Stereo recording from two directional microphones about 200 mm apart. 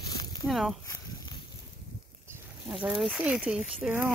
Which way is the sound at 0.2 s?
20° left (ahead or behind).